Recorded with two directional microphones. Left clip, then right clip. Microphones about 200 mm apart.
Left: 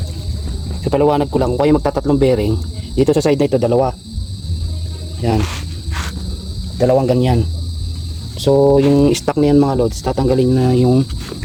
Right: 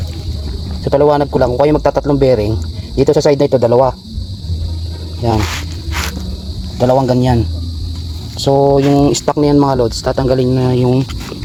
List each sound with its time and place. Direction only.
0.9 s a man's voice: centre (ahead or behind)
5.9 s insect: 50° right (ahead or behind)
6.7 s a man's voice: centre (ahead or behind)
8.4 s a man's voice: centre (ahead or behind)